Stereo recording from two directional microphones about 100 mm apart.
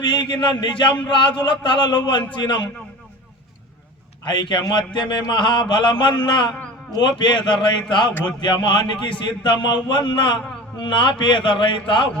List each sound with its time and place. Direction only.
0.0 s mantra: 50° left (ahead or behind)
4.3 s mantra: 50° left (ahead or behind)